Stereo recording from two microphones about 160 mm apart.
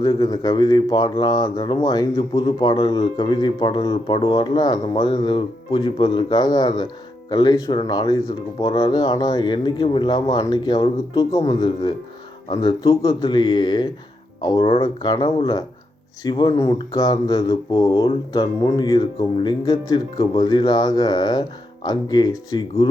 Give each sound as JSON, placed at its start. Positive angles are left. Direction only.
{"t": 0.0, "sound": "speech", "side_deg": 25}